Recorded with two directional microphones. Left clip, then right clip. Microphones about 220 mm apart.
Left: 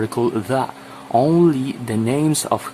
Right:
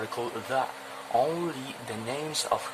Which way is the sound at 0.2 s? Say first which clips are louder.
Left 15 dB; 30° left (ahead or behind).